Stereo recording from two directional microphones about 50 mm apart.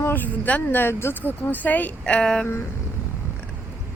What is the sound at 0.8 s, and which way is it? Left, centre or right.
Speech, left.